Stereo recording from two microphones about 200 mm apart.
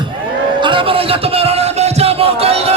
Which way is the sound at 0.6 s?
25° right (ahead or behind).